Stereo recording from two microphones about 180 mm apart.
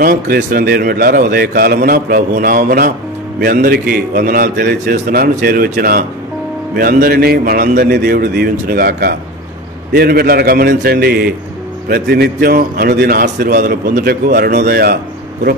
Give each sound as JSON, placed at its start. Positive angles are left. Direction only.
{"t": 0.0, "sound": "a man's voice", "side_deg": -55}